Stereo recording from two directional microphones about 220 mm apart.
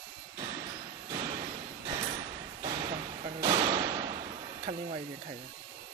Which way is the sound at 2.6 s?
30° right (ahead or behind).